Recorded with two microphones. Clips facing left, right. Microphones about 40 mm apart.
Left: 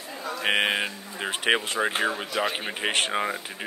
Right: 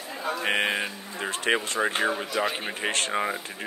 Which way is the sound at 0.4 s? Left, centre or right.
Left.